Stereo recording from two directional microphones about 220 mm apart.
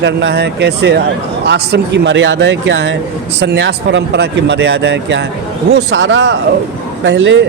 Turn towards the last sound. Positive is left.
turn(degrees=-55)  # may be behind; listen again after turning